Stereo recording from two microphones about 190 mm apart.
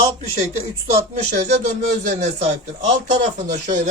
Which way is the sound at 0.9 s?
40° right (ahead or behind).